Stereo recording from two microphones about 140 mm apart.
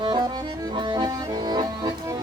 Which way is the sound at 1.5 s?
30° right (ahead or behind).